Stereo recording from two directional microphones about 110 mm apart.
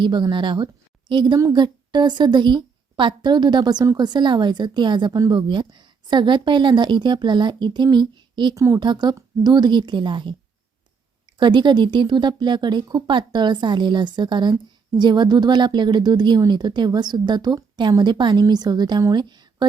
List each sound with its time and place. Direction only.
0.0 s a woman's voice: 45° right (ahead or behind)
8.5 s speech: 30° right (ahead or behind)
8.8 s a woman's voice: 40° right (ahead or behind)
11.3 s a woman's voice: 45° right (ahead or behind)